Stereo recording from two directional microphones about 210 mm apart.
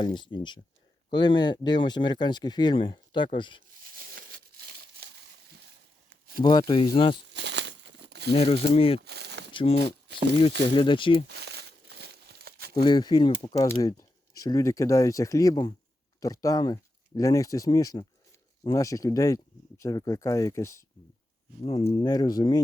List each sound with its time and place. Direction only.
0.0 s speech: 20° left (ahead or behind)
4.1 s crumpling: 45° right (ahead or behind)
6.1 s a sound: 50° right (ahead or behind)
6.4 s speech: 20° left (ahead or behind)
7.3 s crumpling: 55° right (ahead or behind)
8.3 s speech: 30° left (ahead or behind)
9.0 s a sound: 50° right (ahead or behind)
9.5 s speech: 25° left (ahead or behind)
11.3 s crumpling: 50° right (ahead or behind)
12.7 s speech: 20° left (ahead or behind)
21.6 s speech: 25° left (ahead or behind)